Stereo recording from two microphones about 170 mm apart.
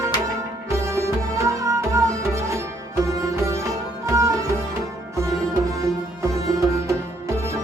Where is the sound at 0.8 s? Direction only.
15° right (ahead or behind).